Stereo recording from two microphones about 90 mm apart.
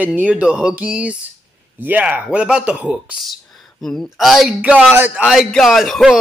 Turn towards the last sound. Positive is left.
turn(degrees=0)  # may be behind; listen again after turning